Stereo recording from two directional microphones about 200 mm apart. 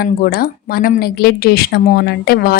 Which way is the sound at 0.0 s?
45° left (ahead or behind).